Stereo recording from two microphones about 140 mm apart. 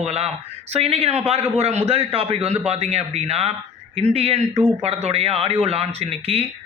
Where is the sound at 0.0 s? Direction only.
50° right (ahead or behind).